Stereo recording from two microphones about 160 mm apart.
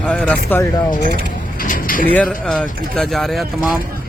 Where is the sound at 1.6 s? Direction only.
60° left (ahead or behind).